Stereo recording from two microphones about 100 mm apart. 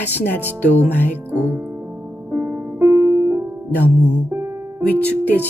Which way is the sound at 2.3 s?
20° right (ahead or behind).